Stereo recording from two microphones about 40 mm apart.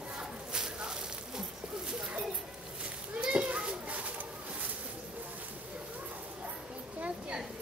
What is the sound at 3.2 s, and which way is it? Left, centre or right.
Children playing, right.